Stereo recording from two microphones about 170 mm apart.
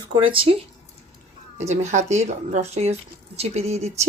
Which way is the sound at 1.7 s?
40° right (ahead or behind).